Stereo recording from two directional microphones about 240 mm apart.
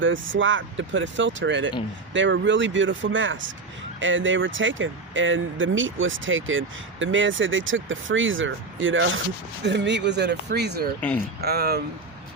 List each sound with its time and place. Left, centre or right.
0.0 s speech: right